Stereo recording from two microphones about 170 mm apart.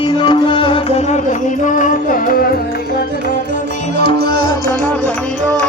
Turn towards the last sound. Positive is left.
turn(degrees=-75)  # may be behind; listen again after turning